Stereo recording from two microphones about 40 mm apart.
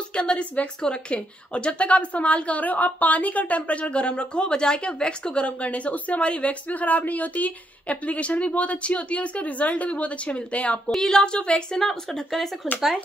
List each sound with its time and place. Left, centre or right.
0.1 s a woman's voice: left
11.0 s a woman's voice: centre
11.8 s speech: centre
12.7 s a woman's voice: left